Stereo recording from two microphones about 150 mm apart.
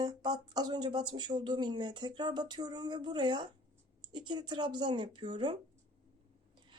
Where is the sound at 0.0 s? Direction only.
25° right (ahead or behind).